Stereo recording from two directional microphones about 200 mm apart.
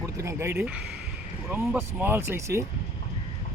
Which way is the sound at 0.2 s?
15° right (ahead or behind).